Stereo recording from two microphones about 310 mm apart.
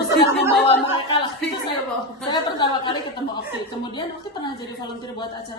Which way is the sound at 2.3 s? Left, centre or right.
Centre.